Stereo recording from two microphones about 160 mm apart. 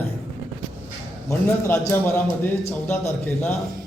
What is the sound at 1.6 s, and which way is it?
A man's voice, 15° left (ahead or behind).